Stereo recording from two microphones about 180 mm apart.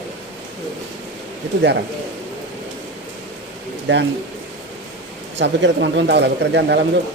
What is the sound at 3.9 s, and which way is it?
Speech, 80° right.